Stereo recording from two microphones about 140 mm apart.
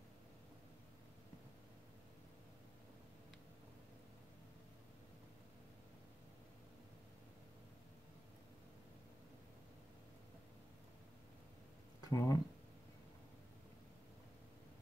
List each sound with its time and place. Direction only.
12.0 s speech: 25° left (ahead or behind)